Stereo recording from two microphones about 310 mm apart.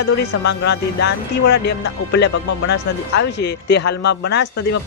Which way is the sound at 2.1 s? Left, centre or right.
Left.